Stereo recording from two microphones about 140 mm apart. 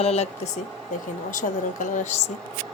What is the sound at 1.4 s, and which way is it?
Speech, 60° left (ahead or behind).